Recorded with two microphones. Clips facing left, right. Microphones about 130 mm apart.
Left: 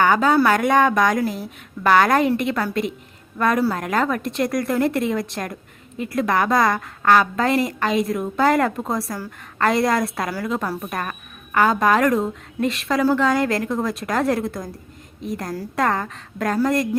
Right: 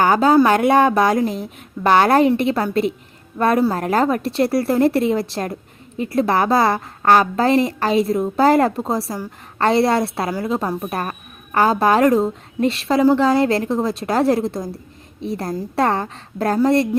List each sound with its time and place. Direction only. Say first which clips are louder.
0.0 s a woman's voice: right 3 dB; 35° right (ahead or behind)